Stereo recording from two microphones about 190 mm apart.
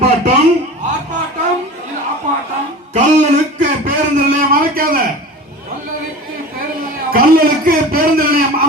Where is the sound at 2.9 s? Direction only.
40° right (ahead or behind).